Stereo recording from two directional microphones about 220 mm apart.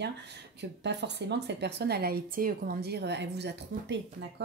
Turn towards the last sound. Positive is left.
turn(degrees=-50)  # may be behind; listen again after turning